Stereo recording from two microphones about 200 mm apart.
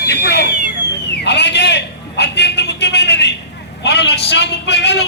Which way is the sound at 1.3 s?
60° left (ahead or behind).